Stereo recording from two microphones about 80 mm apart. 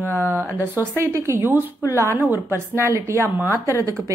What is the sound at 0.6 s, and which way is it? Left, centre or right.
A woman's voice, right.